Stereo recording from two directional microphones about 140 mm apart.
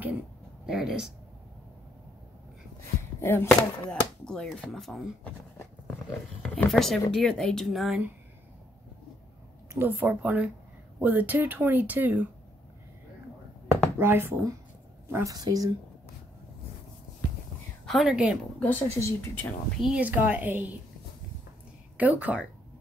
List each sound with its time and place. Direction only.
0.7 s speech: 5° right (ahead or behind)
3.2 s speech: 15° left (ahead or behind)
3.9 s speech: 5° left (ahead or behind)
6.4 s speech: 5° left (ahead or behind)
9.8 s speech: 15° right (ahead or behind)
13.9 s a woman's voice: 15° right (ahead or behind)
15.3 s speech: 25° right (ahead or behind)
17.8 s speech: 5° right (ahead or behind)
18.6 s speech: 15° left (ahead or behind)
19.8 s speech: 10° right (ahead or behind)
21.9 s speech: 10° right (ahead or behind)